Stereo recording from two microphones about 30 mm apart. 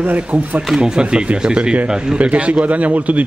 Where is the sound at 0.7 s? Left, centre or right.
Right.